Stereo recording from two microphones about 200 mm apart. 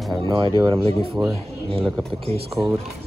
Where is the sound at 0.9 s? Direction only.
30° right (ahead or behind).